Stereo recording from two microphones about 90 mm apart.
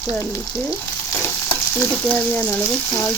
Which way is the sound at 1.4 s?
15° left (ahead or behind).